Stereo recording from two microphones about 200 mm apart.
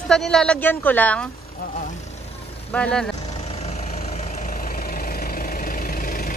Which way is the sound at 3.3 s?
35° left (ahead or behind).